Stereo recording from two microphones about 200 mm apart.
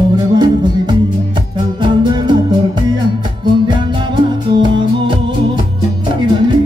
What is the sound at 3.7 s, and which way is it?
Music, 20° right (ahead or behind).